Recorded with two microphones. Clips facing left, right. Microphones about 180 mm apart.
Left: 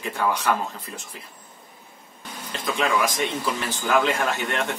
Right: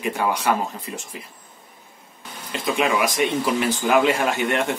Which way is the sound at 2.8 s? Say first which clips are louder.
Right 1 dB; 15° right (ahead or behind).